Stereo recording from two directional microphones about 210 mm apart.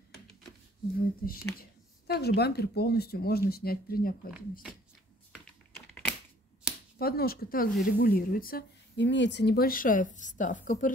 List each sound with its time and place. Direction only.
0.9 s speech: 45° left (ahead or behind)
6.7 s a sound: 5° right (ahead or behind)
7.0 s speech: 45° left (ahead or behind)